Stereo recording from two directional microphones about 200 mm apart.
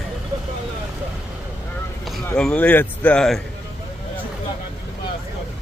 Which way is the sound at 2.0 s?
Centre (ahead or behind).